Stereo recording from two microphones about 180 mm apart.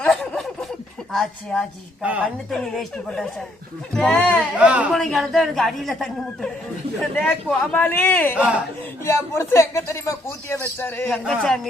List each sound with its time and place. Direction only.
0.0 s a sound: 5° left (ahead or behind)
1.1 s a man's voice: 5° left (ahead or behind)
2.0 s speech: 10° right (ahead or behind)
2.5 s a man's voice: 5° left (ahead or behind)
4.5 s a man's voice: 10° right (ahead or behind)